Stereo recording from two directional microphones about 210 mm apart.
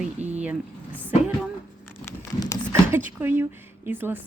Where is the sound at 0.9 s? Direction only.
10° right (ahead or behind).